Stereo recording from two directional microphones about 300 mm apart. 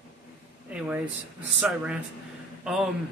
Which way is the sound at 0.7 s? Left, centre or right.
Centre.